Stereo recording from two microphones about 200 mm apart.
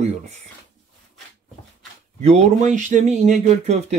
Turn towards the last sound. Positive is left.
turn(degrees=-35)  # may be behind; listen again after turning